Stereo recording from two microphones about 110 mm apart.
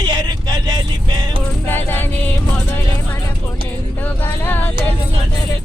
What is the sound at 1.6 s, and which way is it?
Music, 20° left (ahead or behind).